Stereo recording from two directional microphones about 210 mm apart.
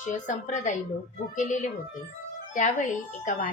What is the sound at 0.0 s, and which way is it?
A woman's voice, 35° left (ahead or behind).